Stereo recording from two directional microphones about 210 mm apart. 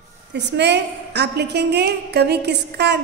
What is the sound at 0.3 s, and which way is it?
A woman's voice, 55° right (ahead or behind).